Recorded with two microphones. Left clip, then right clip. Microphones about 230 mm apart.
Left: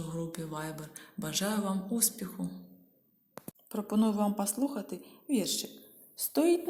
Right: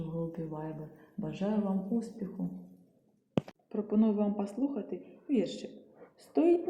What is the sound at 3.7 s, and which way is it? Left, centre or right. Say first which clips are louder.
A woman's voice: left 1 dB; left.